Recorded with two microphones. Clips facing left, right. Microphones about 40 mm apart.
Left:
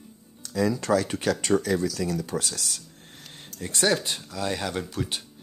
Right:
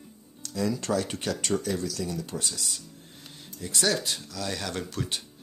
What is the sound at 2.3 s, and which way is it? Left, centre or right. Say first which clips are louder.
Speech: left 4 dB; left.